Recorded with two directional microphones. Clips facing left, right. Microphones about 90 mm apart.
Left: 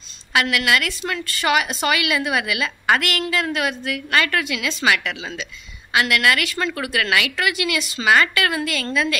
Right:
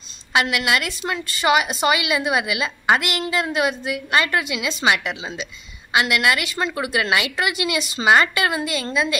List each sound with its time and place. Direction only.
0.3 s a woman's voice: 20° right (ahead or behind)